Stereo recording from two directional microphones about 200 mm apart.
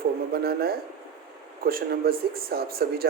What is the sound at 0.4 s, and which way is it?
Speech, 50° right (ahead or behind).